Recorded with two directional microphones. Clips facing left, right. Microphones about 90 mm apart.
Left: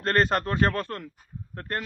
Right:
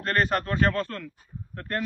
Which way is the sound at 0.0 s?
30° left (ahead or behind).